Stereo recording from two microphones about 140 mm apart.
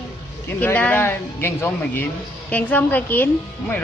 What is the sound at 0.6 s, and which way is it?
A woman's voice, 10° left (ahead or behind).